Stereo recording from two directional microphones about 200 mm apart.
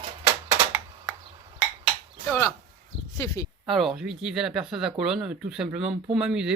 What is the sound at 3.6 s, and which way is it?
Speech, centre (ahead or behind).